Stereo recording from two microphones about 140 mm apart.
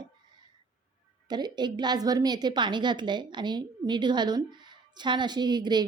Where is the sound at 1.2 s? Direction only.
30° right (ahead or behind).